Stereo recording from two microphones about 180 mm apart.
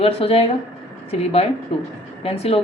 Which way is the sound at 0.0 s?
30° left (ahead or behind).